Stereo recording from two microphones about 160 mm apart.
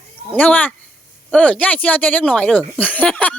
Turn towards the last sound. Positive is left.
turn(degrees=10)  # may be behind; listen again after turning